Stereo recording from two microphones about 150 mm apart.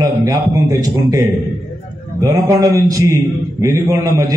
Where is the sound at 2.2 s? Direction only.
25° right (ahead or behind).